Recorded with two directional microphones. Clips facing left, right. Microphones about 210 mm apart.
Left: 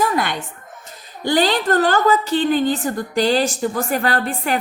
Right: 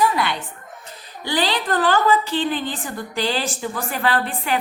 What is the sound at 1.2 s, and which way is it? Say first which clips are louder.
A woman's voice: left 5 dB; 45° left (ahead or behind).